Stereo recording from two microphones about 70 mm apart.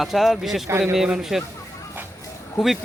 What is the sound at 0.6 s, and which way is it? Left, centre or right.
Speech, right.